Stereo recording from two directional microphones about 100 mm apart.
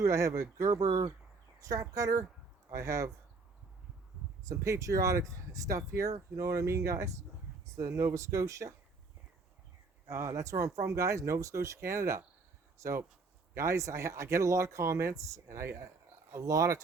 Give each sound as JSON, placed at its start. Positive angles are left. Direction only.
{"t": 0.0, "sound": "speech", "side_deg": -30}
{"t": 4.4, "sound": "speech", "side_deg": -35}
{"t": 10.1, "sound": "speech", "side_deg": -30}